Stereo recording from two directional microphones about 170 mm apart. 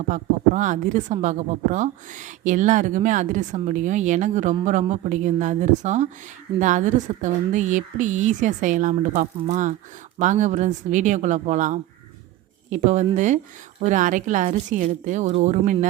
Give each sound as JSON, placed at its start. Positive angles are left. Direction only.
{"t": 0.1, "sound": "a woman's voice", "side_deg": -45}